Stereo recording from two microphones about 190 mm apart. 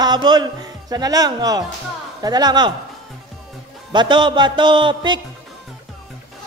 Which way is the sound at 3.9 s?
25° right (ahead or behind).